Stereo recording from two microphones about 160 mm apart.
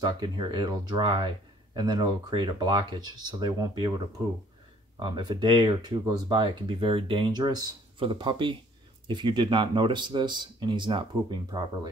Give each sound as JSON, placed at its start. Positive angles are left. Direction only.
{"t": 0.0, "sound": "speech", "side_deg": -25}
{"t": 4.9, "sound": "speech", "side_deg": -30}